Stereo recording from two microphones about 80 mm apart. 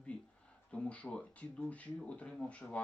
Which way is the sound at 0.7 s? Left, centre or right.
Centre.